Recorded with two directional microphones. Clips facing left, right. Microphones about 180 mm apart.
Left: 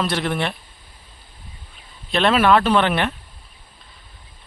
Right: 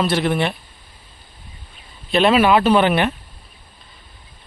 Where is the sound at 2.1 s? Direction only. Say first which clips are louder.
Right 2 dB; 5° right (ahead or behind).